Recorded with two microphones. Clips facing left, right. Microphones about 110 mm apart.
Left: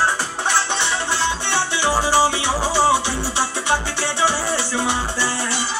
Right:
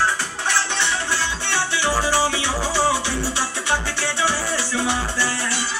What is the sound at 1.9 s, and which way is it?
Music, 20° left (ahead or behind).